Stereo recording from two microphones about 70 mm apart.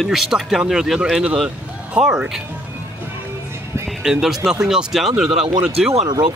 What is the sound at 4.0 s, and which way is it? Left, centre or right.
Speech, centre.